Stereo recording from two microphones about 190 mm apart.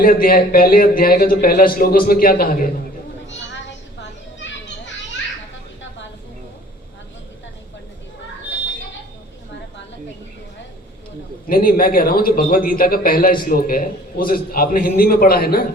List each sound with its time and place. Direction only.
0.0 s a man's voice: 50° left (ahead or behind)
3.2 s children playing: 70° left (ahead or behind)
11.4 s a man's voice: 50° left (ahead or behind)